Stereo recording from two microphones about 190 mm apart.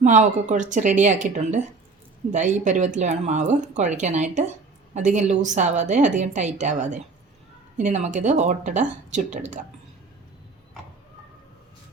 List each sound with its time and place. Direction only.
0.0 s speech: 40° right (ahead or behind)